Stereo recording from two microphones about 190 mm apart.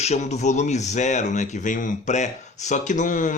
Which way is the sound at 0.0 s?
35° left (ahead or behind).